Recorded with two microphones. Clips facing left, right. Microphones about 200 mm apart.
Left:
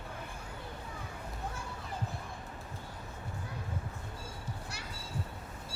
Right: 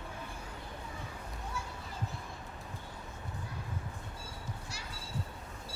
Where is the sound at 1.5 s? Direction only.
55° left (ahead or behind).